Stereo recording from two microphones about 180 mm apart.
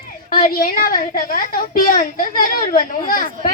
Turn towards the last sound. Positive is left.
turn(degrees=50)  # may be behind; listen again after turning